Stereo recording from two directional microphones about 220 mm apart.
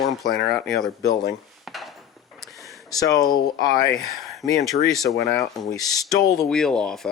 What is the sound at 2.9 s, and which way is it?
Speech, 15° left (ahead or behind).